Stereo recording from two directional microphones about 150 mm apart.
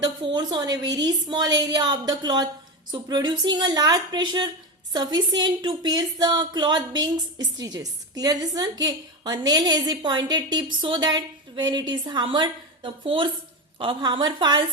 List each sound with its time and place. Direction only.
0.0 s a woman's voice: 30° right (ahead or behind)